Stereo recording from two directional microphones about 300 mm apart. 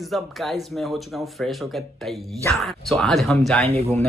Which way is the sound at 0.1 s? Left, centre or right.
Centre.